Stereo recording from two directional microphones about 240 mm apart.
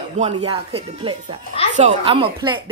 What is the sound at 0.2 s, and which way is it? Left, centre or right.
Speech, right.